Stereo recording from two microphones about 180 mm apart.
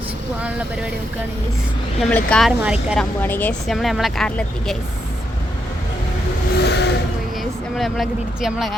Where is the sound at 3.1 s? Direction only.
10° left (ahead or behind).